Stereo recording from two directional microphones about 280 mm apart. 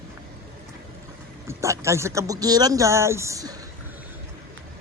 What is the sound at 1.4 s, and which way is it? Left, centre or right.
A man's voice, centre.